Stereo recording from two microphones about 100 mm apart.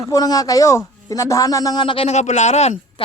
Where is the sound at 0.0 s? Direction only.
35° left (ahead or behind); by 2.0 s 55° left (ahead or behind).